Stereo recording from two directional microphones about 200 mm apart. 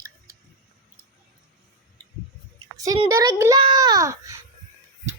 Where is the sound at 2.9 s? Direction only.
15° right (ahead or behind).